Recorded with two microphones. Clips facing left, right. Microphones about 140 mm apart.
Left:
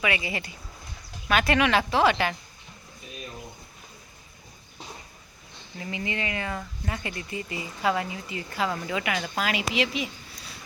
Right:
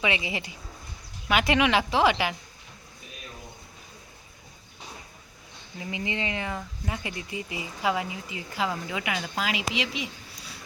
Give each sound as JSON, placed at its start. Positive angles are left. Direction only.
{"t": 0.0, "sound": "speech", "side_deg": -20}
{"t": 5.8, "sound": "speech", "side_deg": -15}
{"t": 9.6, "sound": "speech", "side_deg": 60}